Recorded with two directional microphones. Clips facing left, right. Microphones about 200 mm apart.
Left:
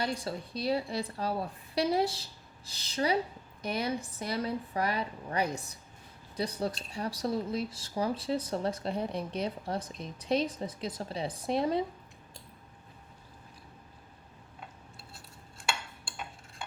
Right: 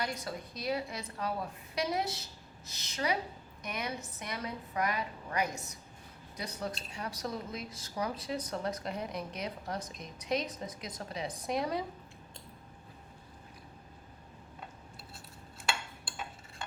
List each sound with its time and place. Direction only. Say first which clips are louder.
0.0 s speech: left 4 dB; 30° left (ahead or behind)